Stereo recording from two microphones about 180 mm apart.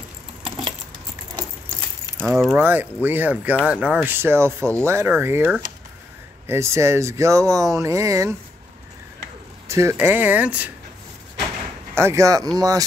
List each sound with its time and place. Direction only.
2.4 s speech: 10° right (ahead or behind)
9.7 s speech: 15° right (ahead or behind)
11.9 s speech: 15° right (ahead or behind)